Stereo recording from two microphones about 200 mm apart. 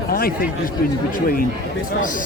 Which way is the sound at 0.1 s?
45° left (ahead or behind).